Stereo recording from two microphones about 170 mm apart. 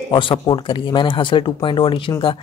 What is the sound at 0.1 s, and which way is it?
Speech, 30° left (ahead or behind).